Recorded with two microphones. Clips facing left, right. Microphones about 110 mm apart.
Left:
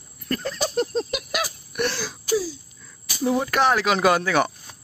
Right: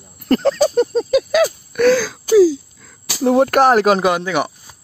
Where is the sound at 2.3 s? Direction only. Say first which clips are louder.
Right 14 dB; 80° right; by 4.0 s 50° right (ahead or behind).